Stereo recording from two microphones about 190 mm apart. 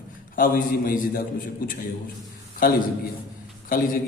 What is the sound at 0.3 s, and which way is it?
Speech, 45° left (ahead or behind).